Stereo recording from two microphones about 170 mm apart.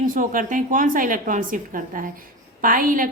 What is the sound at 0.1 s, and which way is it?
A woman's voice, 50° right (ahead or behind).